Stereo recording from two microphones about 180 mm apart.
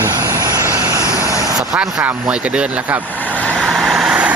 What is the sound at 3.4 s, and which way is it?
Vehicle, centre (ahead or behind).